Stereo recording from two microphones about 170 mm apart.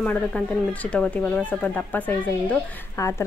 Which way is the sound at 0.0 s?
5° left (ahead or behind).